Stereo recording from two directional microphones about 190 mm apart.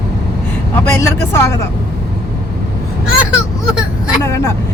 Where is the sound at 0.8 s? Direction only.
15° left (ahead or behind).